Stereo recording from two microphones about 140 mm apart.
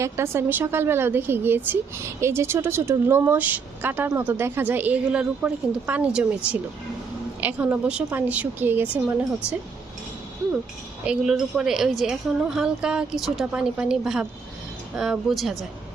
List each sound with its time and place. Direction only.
0.0 s a woman's voice: 20° right (ahead or behind)
11.0 s a woman's voice: 5° right (ahead or behind)